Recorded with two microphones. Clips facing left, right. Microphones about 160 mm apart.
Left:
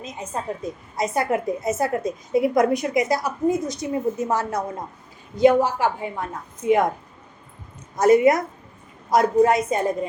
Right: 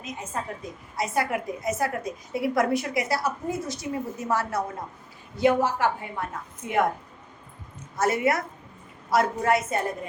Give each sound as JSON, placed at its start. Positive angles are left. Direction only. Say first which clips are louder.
{"t": 0.3, "sound": "a woman's voice", "louder": "left 7 dB", "side_deg": 25}
{"t": 7.9, "sound": "a woman's voice", "louder": "left 8 dB", "side_deg": 15}